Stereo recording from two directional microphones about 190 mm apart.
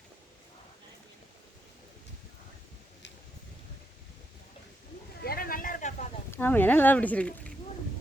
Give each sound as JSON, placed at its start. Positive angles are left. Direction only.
{"t": 5.2, "sound": "vehicle", "side_deg": 50}
{"t": 6.3, "sound": "speech", "side_deg": 10}